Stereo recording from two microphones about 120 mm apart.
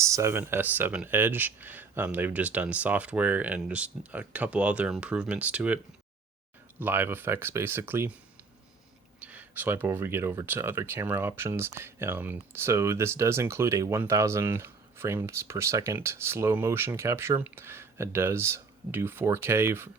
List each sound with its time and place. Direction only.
0.0 s speech: 25° right (ahead or behind)
9.2 s speech: 15° right (ahead or behind)